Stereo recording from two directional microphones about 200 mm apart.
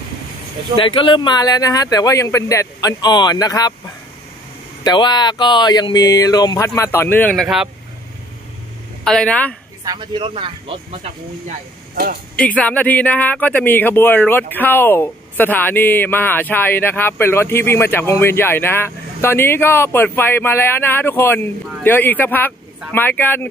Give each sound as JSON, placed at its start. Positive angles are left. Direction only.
{"t": 0.7, "sound": "speech", "side_deg": 25}
{"t": 9.0, "sound": "speech", "side_deg": 5}
{"t": 9.8, "sound": "speech", "side_deg": -25}
{"t": 11.9, "sound": "speech", "side_deg": -50}
{"t": 12.4, "sound": "speech", "side_deg": 5}